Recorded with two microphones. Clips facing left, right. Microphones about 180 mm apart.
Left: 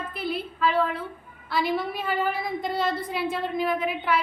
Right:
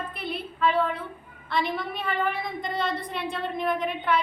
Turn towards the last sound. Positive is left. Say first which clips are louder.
# even
turn(degrees=5)  # may be behind; listen again after turning